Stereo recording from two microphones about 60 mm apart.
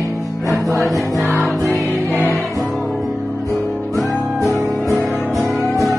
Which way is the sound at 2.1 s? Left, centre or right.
Left.